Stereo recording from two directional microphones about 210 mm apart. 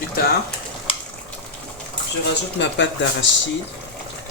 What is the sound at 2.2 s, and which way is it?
Speech, 55° left (ahead or behind).